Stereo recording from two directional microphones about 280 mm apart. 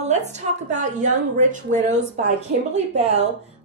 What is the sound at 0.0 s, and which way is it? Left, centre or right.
A woman's voice, right.